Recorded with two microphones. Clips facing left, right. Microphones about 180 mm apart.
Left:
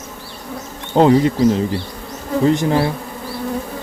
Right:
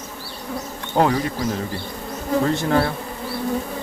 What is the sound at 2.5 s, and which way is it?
Speech, 20° left (ahead or behind).